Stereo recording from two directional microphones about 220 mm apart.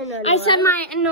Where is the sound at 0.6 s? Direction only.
10° left (ahead or behind).